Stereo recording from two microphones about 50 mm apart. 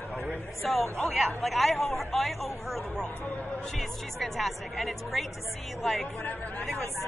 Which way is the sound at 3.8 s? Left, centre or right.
Centre.